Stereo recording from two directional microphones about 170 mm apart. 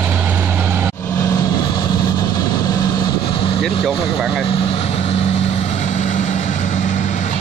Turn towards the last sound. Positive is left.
turn(degrees=45)  # may be behind; listen again after turning